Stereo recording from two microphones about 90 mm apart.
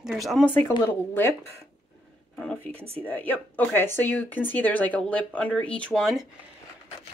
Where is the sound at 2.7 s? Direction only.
90° right.